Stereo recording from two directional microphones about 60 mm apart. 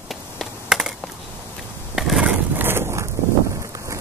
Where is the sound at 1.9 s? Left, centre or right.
Centre.